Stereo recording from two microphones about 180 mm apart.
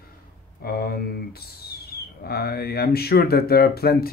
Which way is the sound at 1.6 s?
60° left (ahead or behind).